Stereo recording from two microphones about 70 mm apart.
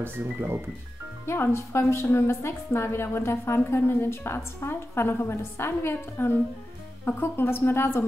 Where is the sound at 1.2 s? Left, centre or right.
Left.